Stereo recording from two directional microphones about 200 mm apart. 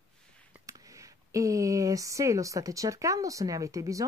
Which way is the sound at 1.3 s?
15° right (ahead or behind).